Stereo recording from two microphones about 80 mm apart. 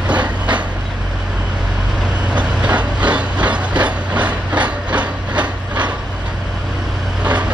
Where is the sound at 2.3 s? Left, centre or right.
Centre.